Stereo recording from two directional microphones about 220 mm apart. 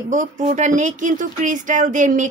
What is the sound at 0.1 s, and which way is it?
Speech, 35° right (ahead or behind).